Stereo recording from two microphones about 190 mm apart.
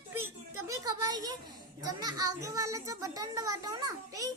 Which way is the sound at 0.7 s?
20° right (ahead or behind).